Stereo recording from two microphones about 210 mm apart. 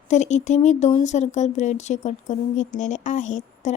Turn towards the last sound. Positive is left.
turn(degrees=35)  # may be behind; listen again after turning